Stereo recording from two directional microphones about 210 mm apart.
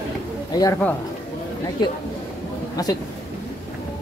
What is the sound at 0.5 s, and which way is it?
Speech, 20° left (ahead or behind).